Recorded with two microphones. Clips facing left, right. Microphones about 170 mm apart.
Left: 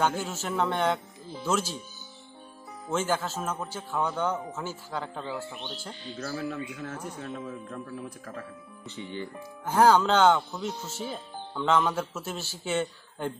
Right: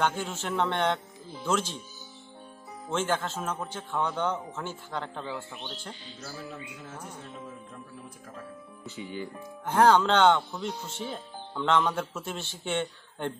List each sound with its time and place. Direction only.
0.0 s a man's voice: 5° left (ahead or behind)
2.9 s a man's voice: 5° left (ahead or behind)
6.1 s a man's voice: 70° left (ahead or behind)
8.8 s speech: 5° right (ahead or behind)
9.7 s speech: 5° left (ahead or behind)